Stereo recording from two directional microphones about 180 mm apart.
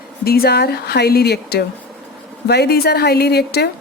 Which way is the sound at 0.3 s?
60° left (ahead or behind).